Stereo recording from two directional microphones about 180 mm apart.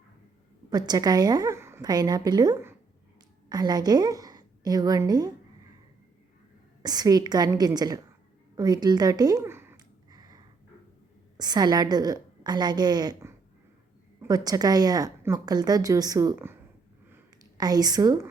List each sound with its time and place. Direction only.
0.7 s a woman's voice: 20° right (ahead or behind)
6.8 s speech: 20° right (ahead or behind)
8.5 s a sound: 20° right (ahead or behind)
11.3 s speech: 25° right (ahead or behind)
17.6 s speech: 20° right (ahead or behind)